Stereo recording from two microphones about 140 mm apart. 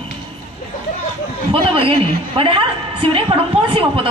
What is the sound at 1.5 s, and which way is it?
A woman's voice, 40° right (ahead or behind).